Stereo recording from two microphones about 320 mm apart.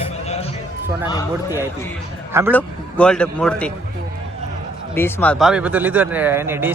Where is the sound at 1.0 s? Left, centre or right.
Centre.